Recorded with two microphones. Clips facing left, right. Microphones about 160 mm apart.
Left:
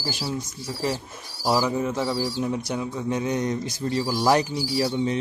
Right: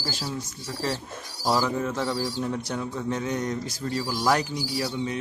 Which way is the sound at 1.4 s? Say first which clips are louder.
Left 2 dB; 10° left (ahead or behind).